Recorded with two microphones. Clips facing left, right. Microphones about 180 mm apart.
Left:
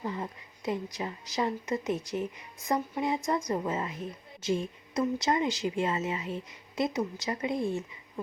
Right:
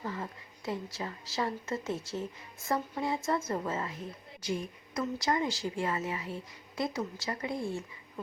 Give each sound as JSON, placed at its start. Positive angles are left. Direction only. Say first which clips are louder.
{"t": 0.0, "sound": "a woman's voice", "louder": "left 3 dB", "side_deg": 20}